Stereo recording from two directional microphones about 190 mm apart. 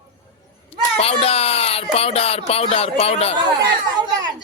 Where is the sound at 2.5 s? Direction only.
30° left (ahead or behind).